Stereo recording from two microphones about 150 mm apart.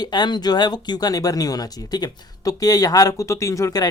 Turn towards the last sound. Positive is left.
turn(degrees=20)  # may be behind; listen again after turning